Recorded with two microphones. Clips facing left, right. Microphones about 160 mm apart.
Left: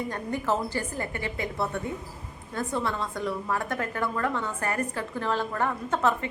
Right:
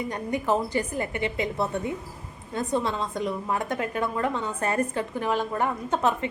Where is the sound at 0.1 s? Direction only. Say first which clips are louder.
Right 5 dB; 15° right (ahead or behind).